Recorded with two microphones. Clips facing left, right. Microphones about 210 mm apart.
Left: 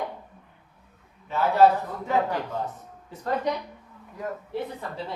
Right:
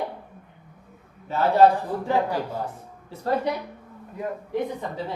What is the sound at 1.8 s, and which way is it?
Speech, 30° right (ahead or behind).